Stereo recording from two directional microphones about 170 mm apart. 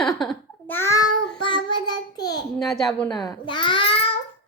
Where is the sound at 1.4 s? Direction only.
25° left (ahead or behind).